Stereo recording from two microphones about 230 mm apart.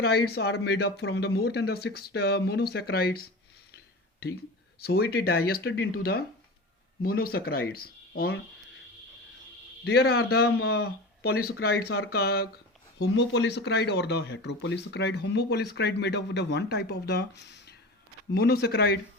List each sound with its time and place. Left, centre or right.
0.0 s speech: left
4.8 s speech: left
9.9 s speech: left